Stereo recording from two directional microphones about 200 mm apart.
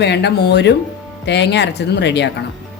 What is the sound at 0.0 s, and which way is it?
A woman's voice, 60° left (ahead or behind).